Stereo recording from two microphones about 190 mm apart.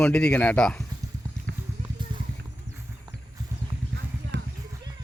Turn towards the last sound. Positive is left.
turn(degrees=-70)  # may be behind; listen again after turning